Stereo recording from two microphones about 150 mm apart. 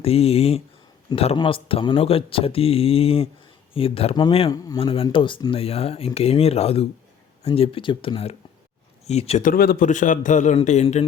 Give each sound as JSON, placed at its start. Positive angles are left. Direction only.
{"t": 0.0, "sound": "speech", "side_deg": 40}
{"t": 4.5, "sound": "a man's voice", "side_deg": 25}
{"t": 4.8, "sound": "speech", "side_deg": 35}
{"t": 9.4, "sound": "a man's voice", "side_deg": 75}